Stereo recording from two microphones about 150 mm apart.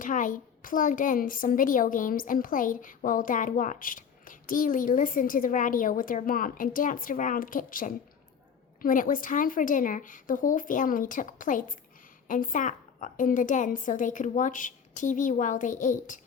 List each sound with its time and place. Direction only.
0.0 s a woman's voice: 60° left (ahead or behind)